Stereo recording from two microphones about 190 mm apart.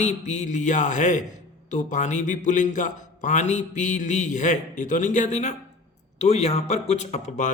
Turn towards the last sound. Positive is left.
turn(degrees=35)  # may be behind; listen again after turning